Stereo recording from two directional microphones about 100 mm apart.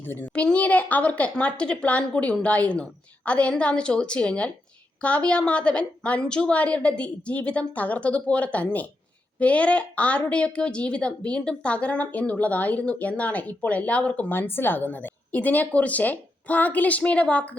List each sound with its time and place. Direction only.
0.0 s a woman's voice: 20° left (ahead or behind)